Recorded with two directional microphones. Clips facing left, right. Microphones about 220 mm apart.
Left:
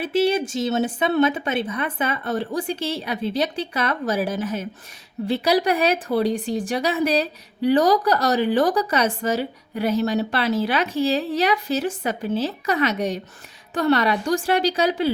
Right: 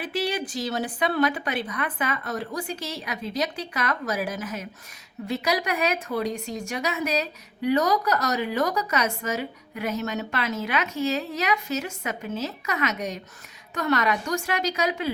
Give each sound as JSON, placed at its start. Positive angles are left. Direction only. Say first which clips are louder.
{"t": 0.0, "sound": "a woman's voice", "louder": "left 8 dB", "side_deg": 25}